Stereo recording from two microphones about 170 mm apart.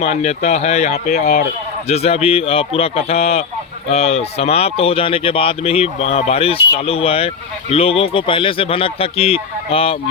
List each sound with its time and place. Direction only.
0.0 s speech: 40° left (ahead or behind)
1.9 s speech: 35° left (ahead or behind)